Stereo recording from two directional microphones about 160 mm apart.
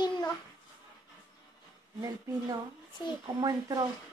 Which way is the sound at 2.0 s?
25° right (ahead or behind).